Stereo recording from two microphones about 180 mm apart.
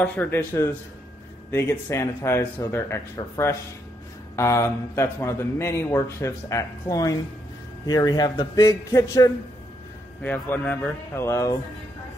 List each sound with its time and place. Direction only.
0.0 s a man's voice: 10° left (ahead or behind)